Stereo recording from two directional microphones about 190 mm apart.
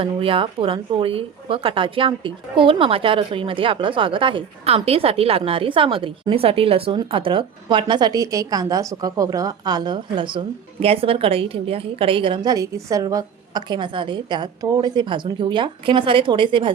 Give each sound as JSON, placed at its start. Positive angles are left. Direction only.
{"t": 0.0, "sound": "speech", "side_deg": -30}